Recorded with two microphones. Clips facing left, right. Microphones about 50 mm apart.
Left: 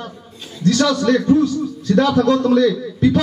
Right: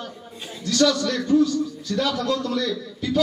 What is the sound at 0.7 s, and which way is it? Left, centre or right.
A man's voice, centre.